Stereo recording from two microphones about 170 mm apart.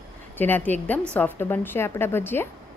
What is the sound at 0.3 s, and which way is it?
A woman's voice, 10° left (ahead or behind).